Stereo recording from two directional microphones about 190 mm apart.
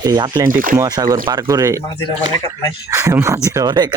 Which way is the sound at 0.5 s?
45° right (ahead or behind).